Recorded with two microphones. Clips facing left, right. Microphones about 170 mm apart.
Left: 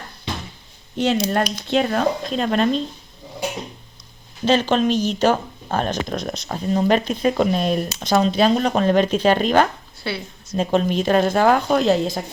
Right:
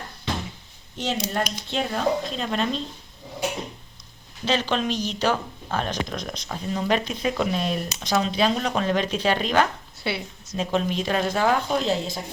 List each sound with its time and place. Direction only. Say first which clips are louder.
0.9 s speech: left 7 dB; 65° left (ahead or behind)
4.4 s speech: left 7 dB; 50° left (ahead or behind)
10.0 s a woman's voice: left 1 dB; 15° right (ahead or behind)
10.5 s speech: left 5 dB; 45° left (ahead or behind)